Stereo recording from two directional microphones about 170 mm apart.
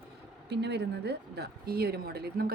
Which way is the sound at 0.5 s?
85° right.